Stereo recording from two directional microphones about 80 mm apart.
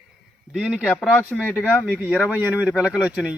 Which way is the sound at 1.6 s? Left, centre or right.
Right.